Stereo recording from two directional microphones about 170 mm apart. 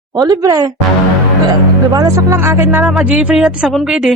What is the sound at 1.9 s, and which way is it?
Speech, 20° right (ahead or behind).